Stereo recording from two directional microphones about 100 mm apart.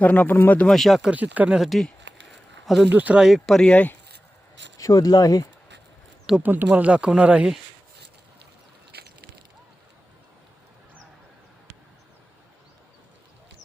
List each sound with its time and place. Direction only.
0.0 s speech: 15° left (ahead or behind)
0.7 s speech: centre (ahead or behind)
1.0 s speech: 15° right (ahead or behind)
1.5 s a sound: centre (ahead or behind)
2.9 s speech: 15° right (ahead or behind)
3.2 s speech: centre (ahead or behind)
4.8 s speech: 35° left (ahead or behind)
6.4 s speech: 20° right (ahead or behind)